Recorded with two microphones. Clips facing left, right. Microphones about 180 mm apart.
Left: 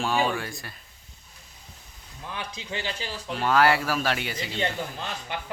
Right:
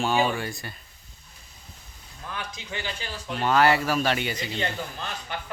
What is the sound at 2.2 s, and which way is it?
Speech, 25° left (ahead or behind).